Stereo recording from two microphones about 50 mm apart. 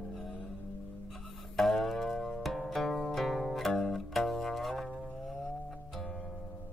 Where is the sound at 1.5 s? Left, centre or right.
Centre.